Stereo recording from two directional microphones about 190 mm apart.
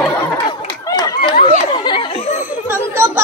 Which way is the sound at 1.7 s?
25° left (ahead or behind).